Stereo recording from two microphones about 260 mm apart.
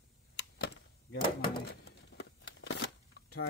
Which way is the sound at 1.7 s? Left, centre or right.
Left.